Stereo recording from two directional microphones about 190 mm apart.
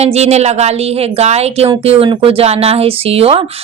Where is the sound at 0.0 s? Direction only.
35° right (ahead or behind).